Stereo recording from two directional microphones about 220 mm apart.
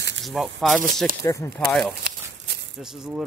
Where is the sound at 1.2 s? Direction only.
10° left (ahead or behind).